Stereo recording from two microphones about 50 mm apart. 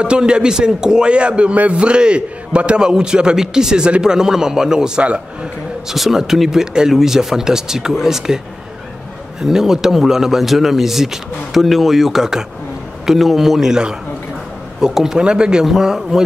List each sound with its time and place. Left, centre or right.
0.0 s a man's voice: centre
5.9 s a man's voice: centre
9.4 s a man's voice: centre